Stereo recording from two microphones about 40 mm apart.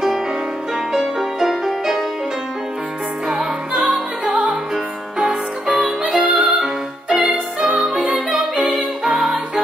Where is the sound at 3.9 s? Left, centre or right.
Right.